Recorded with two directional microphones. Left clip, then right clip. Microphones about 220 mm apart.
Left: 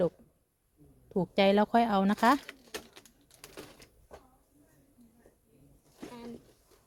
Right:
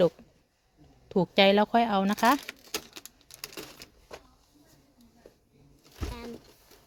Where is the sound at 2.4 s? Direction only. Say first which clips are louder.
Right 6 dB; 55° right (ahead or behind).